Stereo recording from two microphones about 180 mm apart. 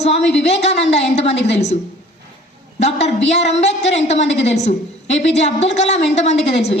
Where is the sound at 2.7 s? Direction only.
35° left (ahead or behind).